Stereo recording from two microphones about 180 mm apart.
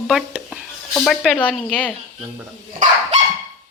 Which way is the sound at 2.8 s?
40° right (ahead or behind).